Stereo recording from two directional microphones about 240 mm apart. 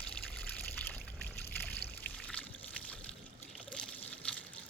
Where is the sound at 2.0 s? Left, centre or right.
Centre.